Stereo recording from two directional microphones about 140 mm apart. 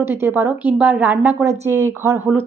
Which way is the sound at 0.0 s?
15° right (ahead or behind).